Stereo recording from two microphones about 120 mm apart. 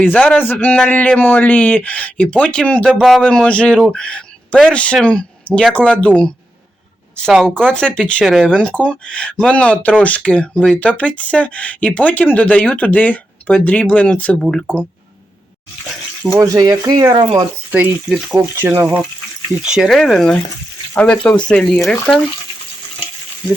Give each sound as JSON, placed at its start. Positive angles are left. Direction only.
{"t": 0.0, "sound": "speech", "side_deg": 10}
{"t": 7.4, "sound": "speech", "side_deg": 5}
{"t": 8.2, "sound": "speech", "side_deg": 0}
{"t": 8.4, "sound": "speech", "side_deg": 10}
{"t": 16.4, "sound": "speech", "side_deg": -30}
{"t": 18.1, "sound": "speech", "side_deg": -5}
{"t": 18.6, "sound": "speech", "side_deg": -15}
{"t": 19.6, "sound": "speech", "side_deg": -5}